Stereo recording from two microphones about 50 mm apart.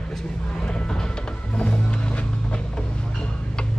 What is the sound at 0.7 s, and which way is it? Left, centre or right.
Music, centre.